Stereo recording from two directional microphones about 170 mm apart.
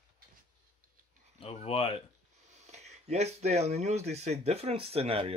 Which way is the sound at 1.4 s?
35° left (ahead or behind).